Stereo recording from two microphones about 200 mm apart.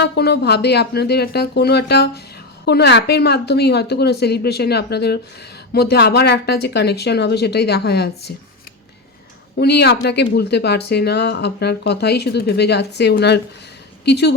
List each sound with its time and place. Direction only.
0.0 s speech: 55° left (ahead or behind)
9.6 s speech: 55° left (ahead or behind)